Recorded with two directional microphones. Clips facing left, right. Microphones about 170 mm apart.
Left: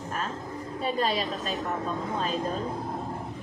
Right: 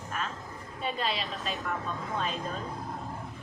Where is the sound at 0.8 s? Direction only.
40° left (ahead or behind).